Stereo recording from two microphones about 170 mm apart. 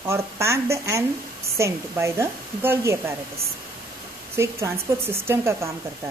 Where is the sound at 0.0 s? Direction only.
15° right (ahead or behind).